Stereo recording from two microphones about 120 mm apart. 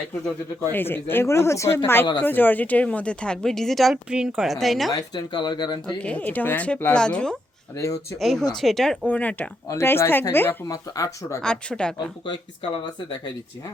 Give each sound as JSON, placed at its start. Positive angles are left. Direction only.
{"t": 0.7, "sound": "speech", "side_deg": 15}
{"t": 4.9, "sound": "speech", "side_deg": 35}
{"t": 6.0, "sound": "speech", "side_deg": 10}
{"t": 9.0, "sound": "speech", "side_deg": 15}
{"t": 10.7, "sound": "speech", "side_deg": 30}
{"t": 11.4, "sound": "speech", "side_deg": 5}
{"t": 12.2, "sound": "speech", "side_deg": 40}